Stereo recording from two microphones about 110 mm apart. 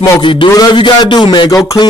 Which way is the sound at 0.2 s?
50° left (ahead or behind).